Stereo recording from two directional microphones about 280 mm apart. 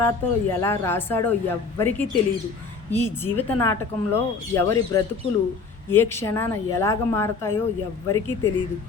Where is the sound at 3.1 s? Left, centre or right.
Centre.